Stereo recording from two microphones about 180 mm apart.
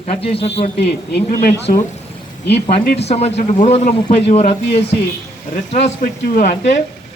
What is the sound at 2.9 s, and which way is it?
Speech, 35° left (ahead or behind).